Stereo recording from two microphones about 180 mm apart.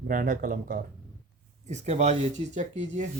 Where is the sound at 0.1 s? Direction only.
50° right (ahead or behind).